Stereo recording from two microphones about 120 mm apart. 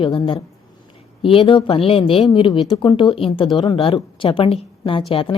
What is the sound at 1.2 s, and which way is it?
Speech, 50° left (ahead or behind).